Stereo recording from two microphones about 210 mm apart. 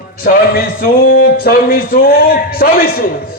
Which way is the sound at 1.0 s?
45° left (ahead or behind).